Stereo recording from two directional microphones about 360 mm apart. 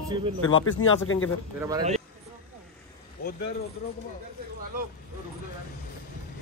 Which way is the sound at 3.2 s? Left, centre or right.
Left.